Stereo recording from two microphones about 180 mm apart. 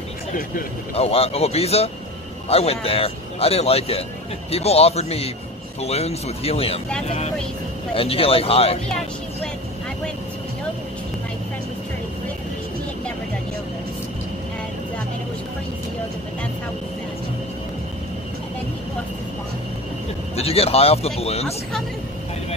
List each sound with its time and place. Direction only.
0.9 s a man's voice: 35° left (ahead or behind)
7.9 s a man's voice: 30° left (ahead or behind)
20.3 s a man's voice: 35° left (ahead or behind)